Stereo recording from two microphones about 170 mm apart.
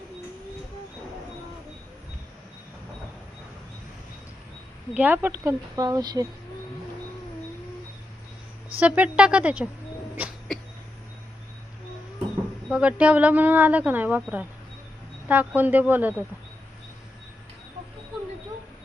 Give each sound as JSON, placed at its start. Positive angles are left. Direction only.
{"t": 4.9, "sound": "speech", "side_deg": -10}
{"t": 8.8, "sound": "speech", "side_deg": -5}
{"t": 12.6, "sound": "speech", "side_deg": -5}
{"t": 15.3, "sound": "speech", "side_deg": -10}